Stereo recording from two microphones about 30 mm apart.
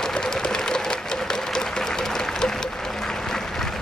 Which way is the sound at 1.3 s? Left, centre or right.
Centre.